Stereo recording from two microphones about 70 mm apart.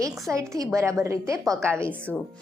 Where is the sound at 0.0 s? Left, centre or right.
Right.